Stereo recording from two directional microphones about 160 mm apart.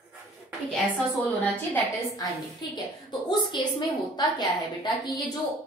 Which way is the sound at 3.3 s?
25° left (ahead or behind).